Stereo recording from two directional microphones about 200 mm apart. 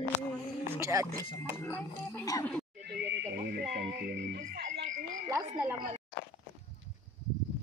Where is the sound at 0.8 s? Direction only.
15° right (ahead or behind).